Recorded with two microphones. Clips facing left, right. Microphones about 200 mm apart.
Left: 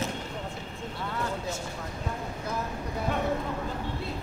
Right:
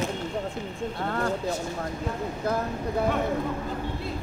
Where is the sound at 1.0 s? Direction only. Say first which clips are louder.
Right 4 dB; 55° right (ahead or behind).